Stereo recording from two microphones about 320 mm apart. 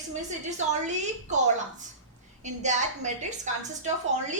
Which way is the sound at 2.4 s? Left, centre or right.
Right.